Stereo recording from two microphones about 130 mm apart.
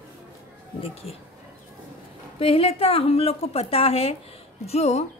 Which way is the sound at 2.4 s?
45° left (ahead or behind).